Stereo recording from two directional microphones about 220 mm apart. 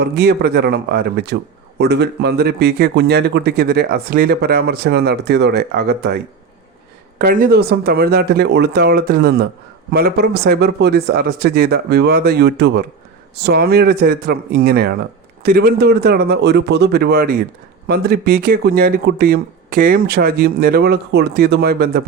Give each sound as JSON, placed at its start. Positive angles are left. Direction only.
{"t": 0.0, "sound": "speech", "side_deg": -45}
{"t": 7.2, "sound": "speech", "side_deg": -40}